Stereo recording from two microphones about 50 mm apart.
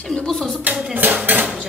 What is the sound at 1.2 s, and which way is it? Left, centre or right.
Cutlery, right.